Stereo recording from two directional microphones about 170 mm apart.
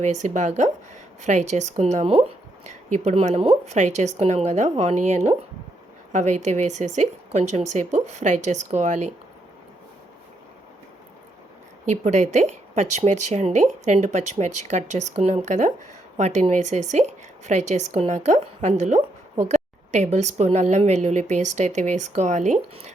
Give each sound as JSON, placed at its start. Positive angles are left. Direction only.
{"t": 0.0, "sound": "a woman's voice", "side_deg": -45}
{"t": 11.9, "sound": "a woman's voice", "side_deg": -45}